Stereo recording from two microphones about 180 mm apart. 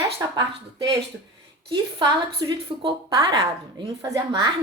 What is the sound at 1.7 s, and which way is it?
A woman's voice, 25° right (ahead or behind).